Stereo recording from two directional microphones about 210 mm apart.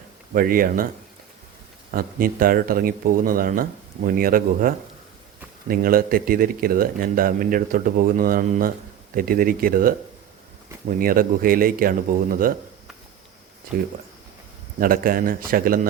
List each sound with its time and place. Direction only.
0.3 s speech: 45° right (ahead or behind)
1.9 s speech: 45° right (ahead or behind)
14.8 s speech: 45° right (ahead or behind)